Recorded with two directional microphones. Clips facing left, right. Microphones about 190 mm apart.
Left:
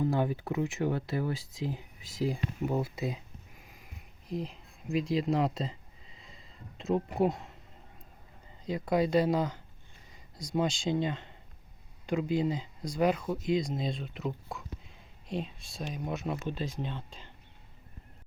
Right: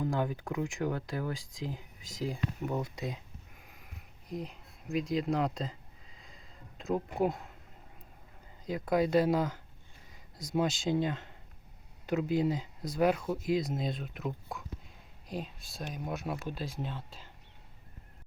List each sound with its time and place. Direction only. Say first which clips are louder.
0.0 s speech: left 3 dB; 5° left (ahead or behind)
3.6 s a sound: left 1 dB; centre (ahead or behind)
8.6 s speech: left 1 dB; centre (ahead or behind)